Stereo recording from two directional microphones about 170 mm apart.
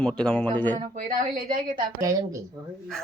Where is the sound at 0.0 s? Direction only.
5° left (ahead or behind).